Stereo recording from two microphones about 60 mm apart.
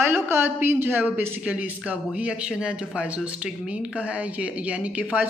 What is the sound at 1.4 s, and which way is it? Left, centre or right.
A woman's voice, right.